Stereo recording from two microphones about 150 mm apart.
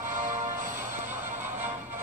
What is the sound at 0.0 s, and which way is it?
Music, 60° right (ahead or behind).